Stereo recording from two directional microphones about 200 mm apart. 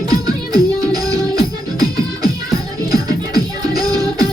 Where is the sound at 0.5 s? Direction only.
20° right (ahead or behind).